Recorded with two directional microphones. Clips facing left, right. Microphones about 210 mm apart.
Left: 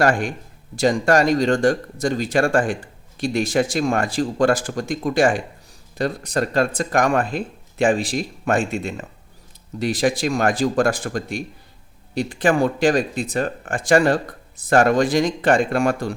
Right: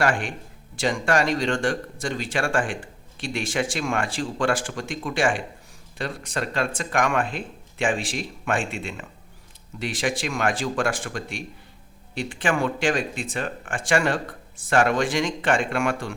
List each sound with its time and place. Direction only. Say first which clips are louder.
0.0 s speech: left 5 dB; 40° left (ahead or behind)